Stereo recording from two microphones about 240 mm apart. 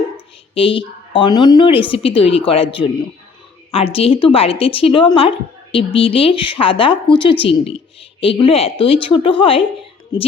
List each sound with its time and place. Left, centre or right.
0.5 s a woman's voice: left
3.9 s a woman's voice: left